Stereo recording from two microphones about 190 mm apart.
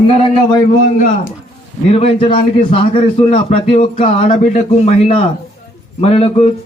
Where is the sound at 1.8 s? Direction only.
30° left (ahead or behind).